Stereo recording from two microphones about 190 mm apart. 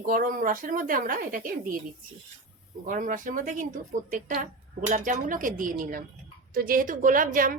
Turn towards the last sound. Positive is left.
turn(degrees=-45)  # may be behind; listen again after turning